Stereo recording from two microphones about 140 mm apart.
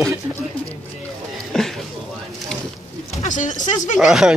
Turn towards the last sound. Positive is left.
turn(degrees=-5)  # may be behind; listen again after turning